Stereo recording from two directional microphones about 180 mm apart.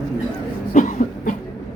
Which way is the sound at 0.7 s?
45° left (ahead or behind).